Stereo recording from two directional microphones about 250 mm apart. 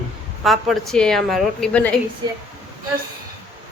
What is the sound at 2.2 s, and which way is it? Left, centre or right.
Speech, centre.